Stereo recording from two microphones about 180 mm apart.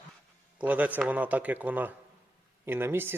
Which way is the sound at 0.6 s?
10° right (ahead or behind).